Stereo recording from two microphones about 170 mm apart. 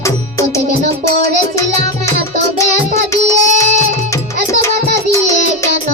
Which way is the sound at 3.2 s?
45° right (ahead or behind).